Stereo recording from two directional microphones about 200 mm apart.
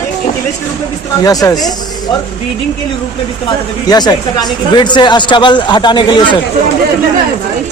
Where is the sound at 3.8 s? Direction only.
20° left (ahead or behind).